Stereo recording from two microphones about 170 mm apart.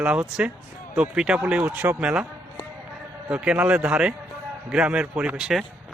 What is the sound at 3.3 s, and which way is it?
Speech, 5° right (ahead or behind).